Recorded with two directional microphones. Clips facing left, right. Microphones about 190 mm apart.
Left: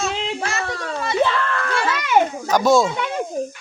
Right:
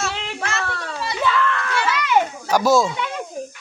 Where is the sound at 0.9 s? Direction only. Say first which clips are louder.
Left 5 dB; 25° left (ahead or behind).